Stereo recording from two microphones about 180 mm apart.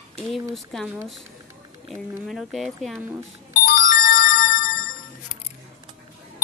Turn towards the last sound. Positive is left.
turn(degrees=50)  # may be behind; listen again after turning